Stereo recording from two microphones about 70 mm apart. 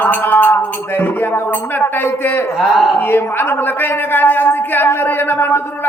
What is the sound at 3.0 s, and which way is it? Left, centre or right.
A man's voice, left.